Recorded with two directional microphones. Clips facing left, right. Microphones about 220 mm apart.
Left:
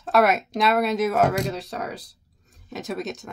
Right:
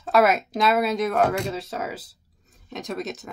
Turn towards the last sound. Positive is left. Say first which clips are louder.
# left 1 dB
turn(degrees=0)  # may be behind; listen again after turning